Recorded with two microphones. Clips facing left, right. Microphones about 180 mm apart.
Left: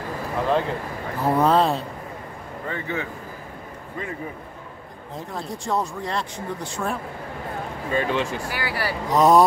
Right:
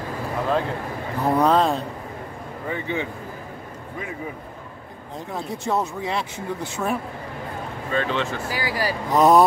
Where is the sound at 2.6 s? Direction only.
20° right (ahead or behind).